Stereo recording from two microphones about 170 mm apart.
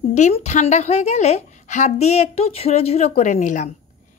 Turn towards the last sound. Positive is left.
turn(degrees=45)  # may be behind; listen again after turning